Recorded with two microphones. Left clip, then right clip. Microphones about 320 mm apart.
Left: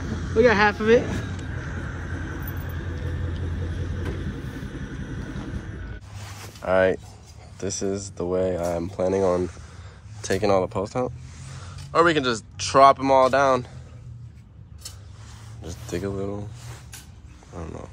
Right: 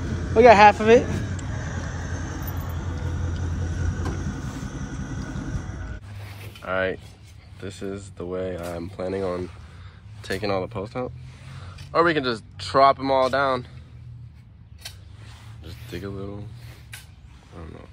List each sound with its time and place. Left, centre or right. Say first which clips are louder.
0.4 s speech: right 6 dB; centre
2.0 s vehicle: even; right
6.6 s speech: left 5 dB; centre
11.9 s speech: left 1 dB; centre
15.6 s speech: left 6 dB; centre
17.6 s a sound: left 6 dB; centre